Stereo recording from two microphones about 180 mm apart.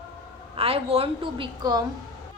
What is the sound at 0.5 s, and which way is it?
A woman's voice, 30° right (ahead or behind).